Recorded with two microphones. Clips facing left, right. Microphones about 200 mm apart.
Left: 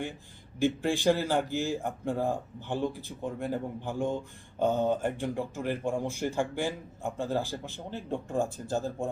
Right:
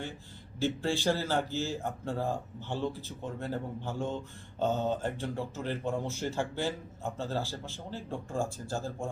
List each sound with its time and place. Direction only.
0.6 s speech: 15° left (ahead or behind)